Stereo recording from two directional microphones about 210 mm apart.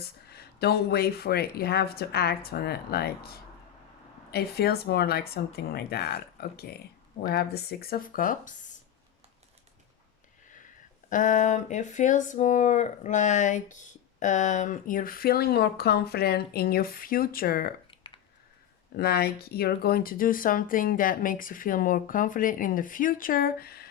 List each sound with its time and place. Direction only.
0.0 s speech: 50° left (ahead or behind)
11.1 s speech: 35° left (ahead or behind)
17.9 s clicking: 25° left (ahead or behind)
18.9 s speech: 45° left (ahead or behind)